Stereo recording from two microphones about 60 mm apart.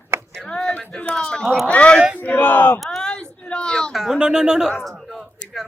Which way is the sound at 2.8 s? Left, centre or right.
Centre.